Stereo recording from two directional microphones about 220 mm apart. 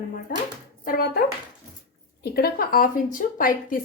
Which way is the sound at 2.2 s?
45° left (ahead or behind).